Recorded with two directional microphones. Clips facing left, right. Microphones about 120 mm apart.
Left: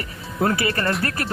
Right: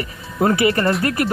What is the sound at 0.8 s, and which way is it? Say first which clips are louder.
Speech: right 5 dB; centre (ahead or behind).